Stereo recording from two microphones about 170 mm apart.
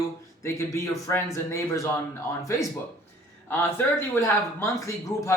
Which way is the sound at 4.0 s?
15° left (ahead or behind).